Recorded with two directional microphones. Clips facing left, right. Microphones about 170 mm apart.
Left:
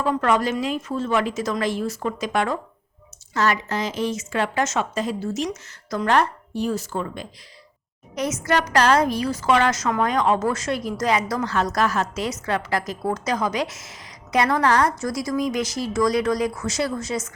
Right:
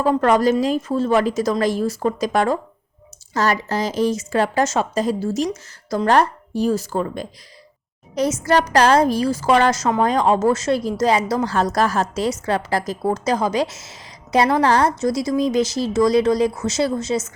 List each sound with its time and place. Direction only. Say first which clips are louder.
0.0 s a woman's voice: right 5 dB; 40° right (ahead or behind)